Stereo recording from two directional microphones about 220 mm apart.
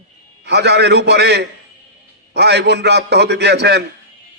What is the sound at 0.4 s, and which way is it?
Speech, 50° right (ahead or behind).